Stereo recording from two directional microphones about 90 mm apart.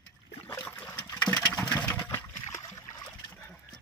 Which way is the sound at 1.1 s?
20° left (ahead or behind).